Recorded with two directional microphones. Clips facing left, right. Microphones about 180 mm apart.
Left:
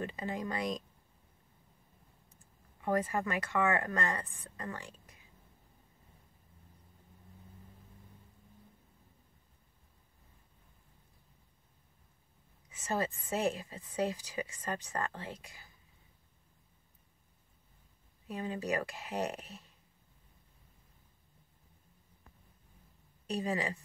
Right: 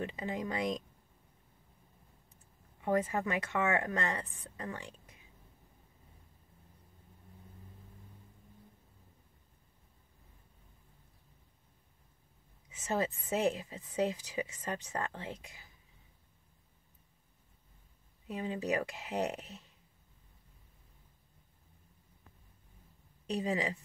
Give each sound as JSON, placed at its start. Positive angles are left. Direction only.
{"t": 0.0, "sound": "speech", "side_deg": -15}
{"t": 2.8, "sound": "a woman's voice", "side_deg": -20}
{"t": 12.8, "sound": "a woman's voice", "side_deg": -20}
{"t": 18.3, "sound": "a woman's voice", "side_deg": -20}
{"t": 23.2, "sound": "a woman's voice", "side_deg": -20}